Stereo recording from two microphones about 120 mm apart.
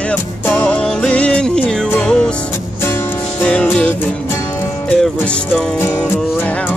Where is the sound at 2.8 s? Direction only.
20° left (ahead or behind).